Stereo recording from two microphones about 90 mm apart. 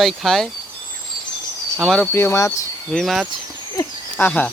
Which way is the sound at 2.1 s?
30° left (ahead or behind).